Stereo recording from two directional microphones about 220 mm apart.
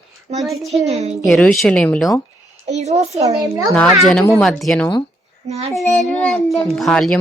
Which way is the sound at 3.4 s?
15° right (ahead or behind).